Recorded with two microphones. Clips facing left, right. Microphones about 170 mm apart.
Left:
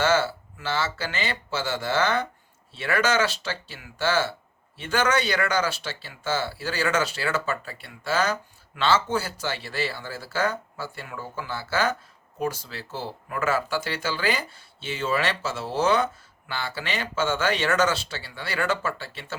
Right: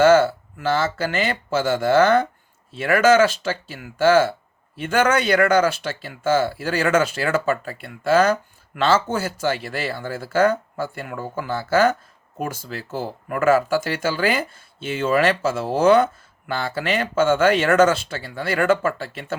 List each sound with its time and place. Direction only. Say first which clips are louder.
0.0 s speech: right 9 dB; 50° right (ahead or behind)